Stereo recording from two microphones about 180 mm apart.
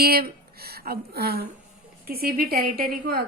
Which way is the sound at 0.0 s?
60° right (ahead or behind).